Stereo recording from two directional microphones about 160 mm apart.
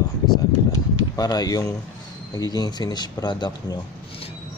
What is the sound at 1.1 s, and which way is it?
Speech, 25° left (ahead or behind).